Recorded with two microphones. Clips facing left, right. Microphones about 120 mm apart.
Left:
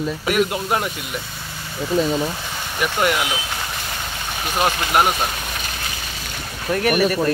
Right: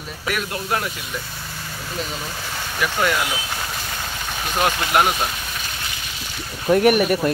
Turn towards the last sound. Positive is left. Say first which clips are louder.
# right 1 dB
turn(degrees=-15)  # may be behind; listen again after turning